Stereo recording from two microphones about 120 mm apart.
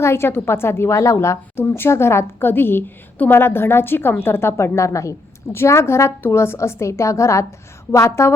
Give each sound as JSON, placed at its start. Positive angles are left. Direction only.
{"t": 0.0, "sound": "a woman's voice", "side_deg": 20}